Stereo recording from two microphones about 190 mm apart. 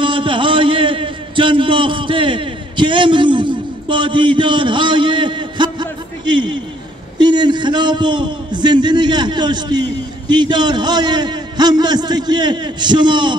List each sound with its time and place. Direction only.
0.0 s a man's voice: 25° right (ahead or behind)